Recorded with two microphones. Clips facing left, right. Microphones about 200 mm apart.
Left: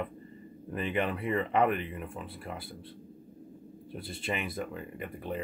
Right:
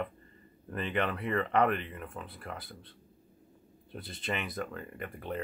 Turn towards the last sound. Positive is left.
turn(degrees=5)  # may be behind; listen again after turning